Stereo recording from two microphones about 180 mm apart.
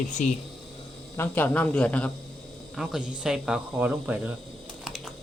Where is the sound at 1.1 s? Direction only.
10° left (ahead or behind); by 4.2 s 5° right (ahead or behind).